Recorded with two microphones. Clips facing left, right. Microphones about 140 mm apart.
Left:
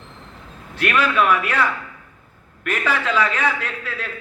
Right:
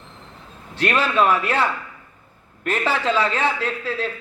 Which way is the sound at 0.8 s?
30° right (ahead or behind).